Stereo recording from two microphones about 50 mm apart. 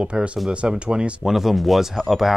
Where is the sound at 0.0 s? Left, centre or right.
Centre.